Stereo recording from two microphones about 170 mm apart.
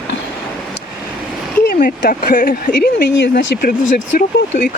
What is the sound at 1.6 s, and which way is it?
Speech, 55° left (ahead or behind).